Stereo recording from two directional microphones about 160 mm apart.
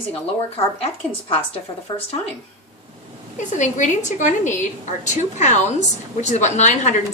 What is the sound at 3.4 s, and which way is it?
A woman's voice, 50° left (ahead or behind).